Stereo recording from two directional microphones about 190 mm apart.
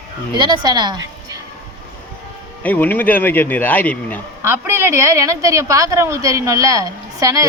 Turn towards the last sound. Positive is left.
turn(degrees=-15)  # may be behind; listen again after turning